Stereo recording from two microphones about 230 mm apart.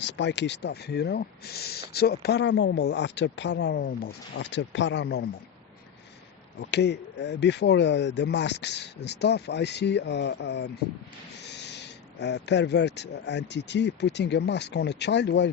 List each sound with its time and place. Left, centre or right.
0.0 s speech: left
6.6 s speech: left